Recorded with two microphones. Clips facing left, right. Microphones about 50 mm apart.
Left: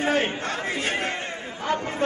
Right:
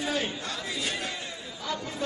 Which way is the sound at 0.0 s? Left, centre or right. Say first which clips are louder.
Left 7 dB; left.